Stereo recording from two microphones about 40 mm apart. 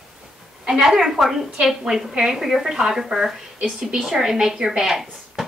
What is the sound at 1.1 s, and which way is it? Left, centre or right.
A woman's voice, centre.